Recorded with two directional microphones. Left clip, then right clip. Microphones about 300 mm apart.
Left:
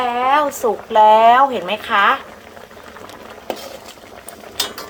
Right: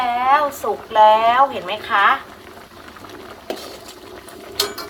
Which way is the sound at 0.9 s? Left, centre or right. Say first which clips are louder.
Left 2 dB; left.